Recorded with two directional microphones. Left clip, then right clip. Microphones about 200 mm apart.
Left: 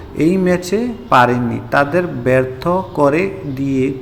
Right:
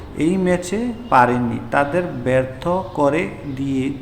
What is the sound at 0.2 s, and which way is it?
A man's voice, 15° left (ahead or behind).